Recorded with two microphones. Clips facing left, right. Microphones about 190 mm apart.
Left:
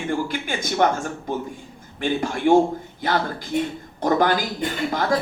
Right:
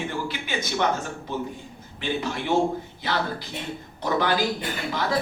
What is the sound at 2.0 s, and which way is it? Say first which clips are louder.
Speech: left 5 dB; 50° left (ahead or behind).